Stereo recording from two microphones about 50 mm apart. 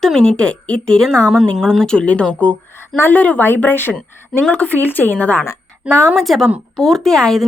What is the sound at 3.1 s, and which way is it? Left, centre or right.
Speech, left.